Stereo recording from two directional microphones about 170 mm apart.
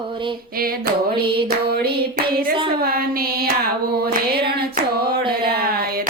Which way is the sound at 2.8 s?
60° right (ahead or behind).